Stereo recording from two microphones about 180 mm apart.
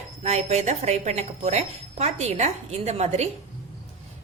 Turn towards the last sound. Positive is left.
turn(degrees=-40)  # may be behind; listen again after turning